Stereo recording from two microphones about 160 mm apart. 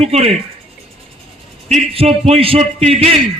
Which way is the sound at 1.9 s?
40° right (ahead or behind).